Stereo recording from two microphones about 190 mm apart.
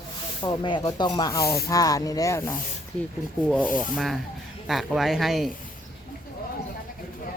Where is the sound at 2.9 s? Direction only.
5° left (ahead or behind).